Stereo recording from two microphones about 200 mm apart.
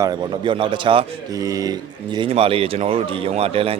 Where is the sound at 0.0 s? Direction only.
20° right (ahead or behind).